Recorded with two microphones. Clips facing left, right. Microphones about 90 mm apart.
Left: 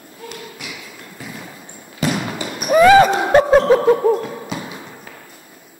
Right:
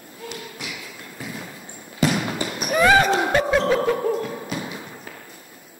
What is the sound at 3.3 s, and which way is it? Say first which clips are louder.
Snicker: left 8 dB; 40° left (ahead or behind).